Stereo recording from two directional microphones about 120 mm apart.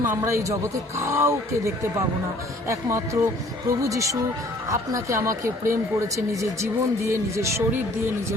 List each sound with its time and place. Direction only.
0.0 s speech: 20° right (ahead or behind)